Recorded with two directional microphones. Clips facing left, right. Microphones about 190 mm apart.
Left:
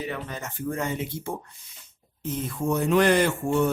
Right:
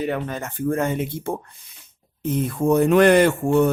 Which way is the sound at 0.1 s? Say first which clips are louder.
Right 7 dB; 55° right (ahead or behind).